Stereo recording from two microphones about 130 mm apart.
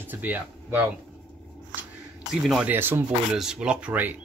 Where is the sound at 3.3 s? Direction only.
5° right (ahead or behind).